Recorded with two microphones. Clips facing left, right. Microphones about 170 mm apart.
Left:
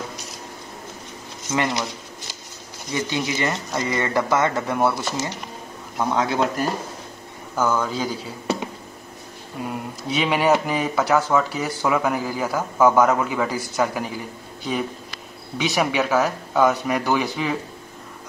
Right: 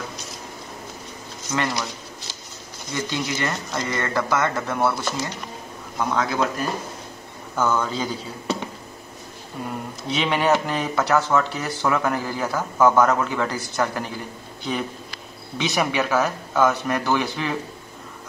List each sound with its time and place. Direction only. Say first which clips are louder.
1.5 s speech: left 2 dB; 20° left (ahead or behind)
2.9 s a man's voice: left 2 dB; 15° left (ahead or behind)
7.5 s speech: left 1 dB; 5° left (ahead or behind)
9.7 s speech: left 1 dB; 5° left (ahead or behind)
15.5 s speech: left 1 dB; 10° left (ahead or behind)